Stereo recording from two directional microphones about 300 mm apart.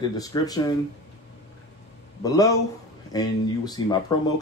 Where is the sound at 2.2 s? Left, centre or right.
Centre.